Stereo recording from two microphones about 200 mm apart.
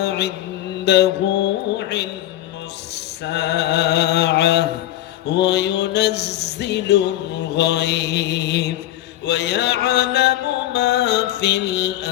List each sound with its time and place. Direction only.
0.0 s music: 55° left (ahead or behind)